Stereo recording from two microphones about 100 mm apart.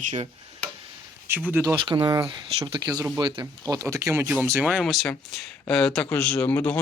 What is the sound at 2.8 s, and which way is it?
Speech, 40° right (ahead or behind).